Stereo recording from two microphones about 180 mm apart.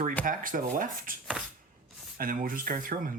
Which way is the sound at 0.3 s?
50° right (ahead or behind).